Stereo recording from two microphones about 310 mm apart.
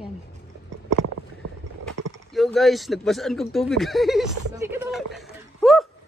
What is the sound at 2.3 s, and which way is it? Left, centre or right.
Speech, centre.